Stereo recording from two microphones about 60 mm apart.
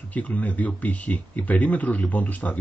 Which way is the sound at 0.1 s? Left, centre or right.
Left.